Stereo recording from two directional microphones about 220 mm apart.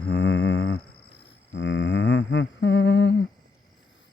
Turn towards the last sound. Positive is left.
turn(degrees=50)  # may be behind; listen again after turning